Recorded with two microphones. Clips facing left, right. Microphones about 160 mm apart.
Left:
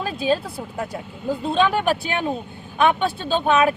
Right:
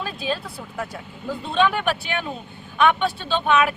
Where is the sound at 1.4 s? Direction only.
40° left (ahead or behind).